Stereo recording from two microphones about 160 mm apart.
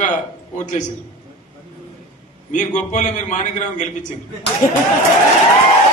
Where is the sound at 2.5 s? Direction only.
50° left (ahead or behind).